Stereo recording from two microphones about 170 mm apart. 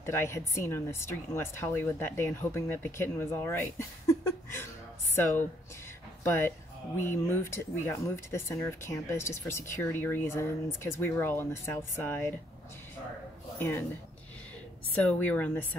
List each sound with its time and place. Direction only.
0.0 s speech: 15° left (ahead or behind)
6.2 s speech: 15° left (ahead or behind)
13.6 s speech: 15° left (ahead or behind)
15.0 s speech: 10° left (ahead or behind)